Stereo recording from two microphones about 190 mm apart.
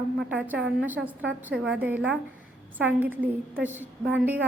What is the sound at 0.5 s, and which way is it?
Speech, 70° right (ahead or behind).